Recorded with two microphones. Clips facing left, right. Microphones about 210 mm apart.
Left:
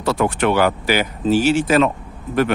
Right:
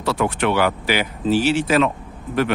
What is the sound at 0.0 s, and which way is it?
Speech, 45° left (ahead or behind).